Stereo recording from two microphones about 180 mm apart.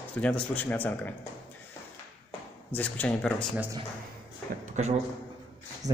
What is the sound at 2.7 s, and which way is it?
Speech, 10° left (ahead or behind).